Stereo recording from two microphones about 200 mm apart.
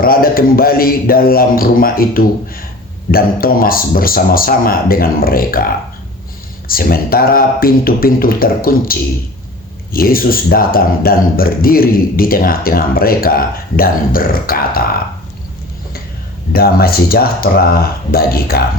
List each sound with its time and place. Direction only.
0.0 s speech: 45° left (ahead or behind)
6.7 s speech: 45° left (ahead or behind)
16.5 s speech: 50° left (ahead or behind)